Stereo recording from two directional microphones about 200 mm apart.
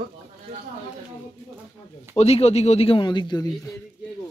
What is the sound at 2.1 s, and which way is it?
Speech, 30° left (ahead or behind).